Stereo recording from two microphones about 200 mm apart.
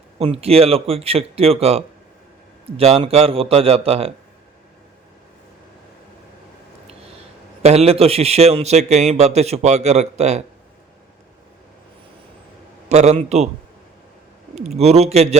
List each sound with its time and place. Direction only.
0.2 s speech: 30° right (ahead or behind)
7.6 s a man's voice: 30° right (ahead or behind)
12.9 s a man's voice: 35° right (ahead or behind)
14.5 s a man's voice: 35° right (ahead or behind)